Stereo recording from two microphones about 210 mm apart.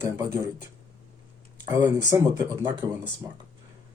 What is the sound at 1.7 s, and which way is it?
Speech, 15° right (ahead or behind).